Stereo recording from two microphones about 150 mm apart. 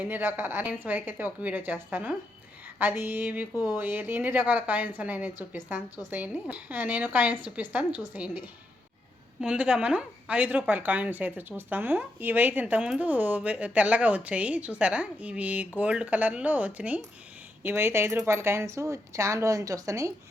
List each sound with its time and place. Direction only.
0.0 s a woman's voice: 15° right (ahead or behind)